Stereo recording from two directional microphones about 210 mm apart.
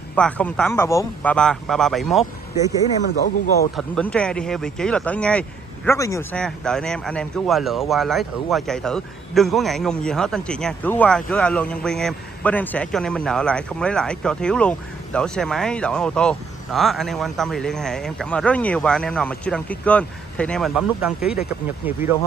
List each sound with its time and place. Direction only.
0.1 s speech: 5° left (ahead or behind)
3.1 s speech: 50° left (ahead or behind)
3.7 s speech: 5° left (ahead or behind)
6.4 s speech: 5° left (ahead or behind)